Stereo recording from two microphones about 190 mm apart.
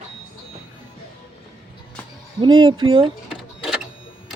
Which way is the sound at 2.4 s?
25° right (ahead or behind).